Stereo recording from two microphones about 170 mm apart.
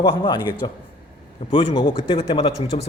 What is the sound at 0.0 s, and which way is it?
A man's voice, 30° left (ahead or behind).